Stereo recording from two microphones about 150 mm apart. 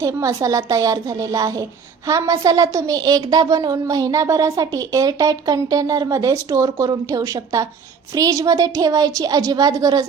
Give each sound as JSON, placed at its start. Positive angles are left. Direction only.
{"t": 0.0, "sound": "a woman's voice", "side_deg": -20}